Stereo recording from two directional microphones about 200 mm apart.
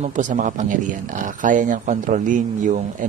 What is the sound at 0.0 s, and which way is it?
Speech, 40° right (ahead or behind).